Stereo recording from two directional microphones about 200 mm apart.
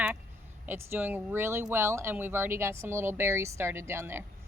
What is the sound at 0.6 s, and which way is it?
Speech, 10° right (ahead or behind).